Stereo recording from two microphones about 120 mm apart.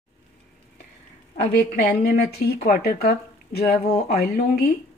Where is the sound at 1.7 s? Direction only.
60° left (ahead or behind).